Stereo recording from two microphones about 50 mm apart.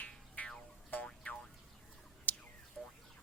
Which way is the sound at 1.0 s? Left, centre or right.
Centre.